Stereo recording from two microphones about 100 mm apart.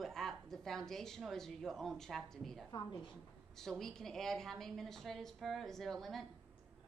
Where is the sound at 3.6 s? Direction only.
5° left (ahead or behind).